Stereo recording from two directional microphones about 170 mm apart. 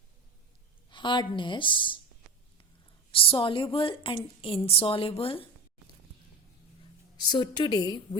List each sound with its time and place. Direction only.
0.9 s a woman's voice: 30° left (ahead or behind)
3.1 s a woman's voice: 30° left (ahead or behind)
7.3 s a woman's voice: 25° left (ahead or behind)